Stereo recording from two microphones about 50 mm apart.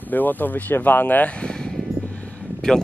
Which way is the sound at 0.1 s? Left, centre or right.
Left.